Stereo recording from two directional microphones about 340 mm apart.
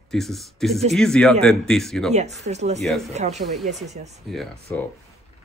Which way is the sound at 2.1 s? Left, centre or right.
Centre.